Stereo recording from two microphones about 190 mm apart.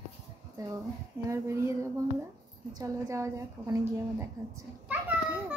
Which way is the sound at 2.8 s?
15° right (ahead or behind).